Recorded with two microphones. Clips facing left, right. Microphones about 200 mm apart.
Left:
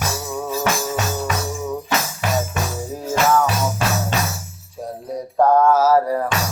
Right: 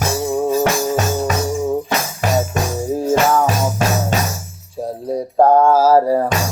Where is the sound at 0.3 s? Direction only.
45° right (ahead or behind).